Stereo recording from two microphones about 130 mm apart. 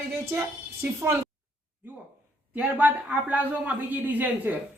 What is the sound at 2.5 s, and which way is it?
A man's voice, 10° right (ahead or behind).